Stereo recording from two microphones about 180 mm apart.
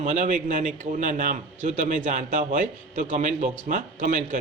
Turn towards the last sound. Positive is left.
turn(degrees=-45)  # may be behind; listen again after turning